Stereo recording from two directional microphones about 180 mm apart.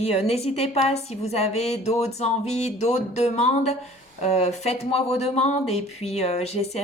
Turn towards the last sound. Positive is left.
turn(degrees=35)  # may be behind; listen again after turning